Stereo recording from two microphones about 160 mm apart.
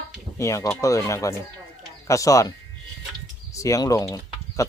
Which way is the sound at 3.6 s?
20° left (ahead or behind).